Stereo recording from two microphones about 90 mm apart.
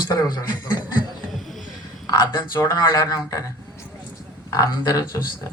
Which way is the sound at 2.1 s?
50° left (ahead or behind).